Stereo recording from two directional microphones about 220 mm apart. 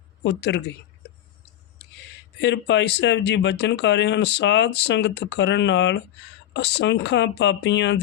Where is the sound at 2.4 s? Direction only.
55° left (ahead or behind).